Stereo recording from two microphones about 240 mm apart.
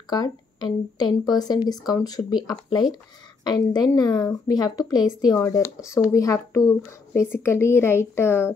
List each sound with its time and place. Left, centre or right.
0.1 s a woman's voice: centre